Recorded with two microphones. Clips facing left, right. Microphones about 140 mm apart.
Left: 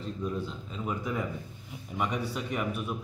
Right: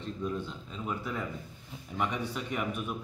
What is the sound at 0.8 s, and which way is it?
A man's voice, 10° left (ahead or behind).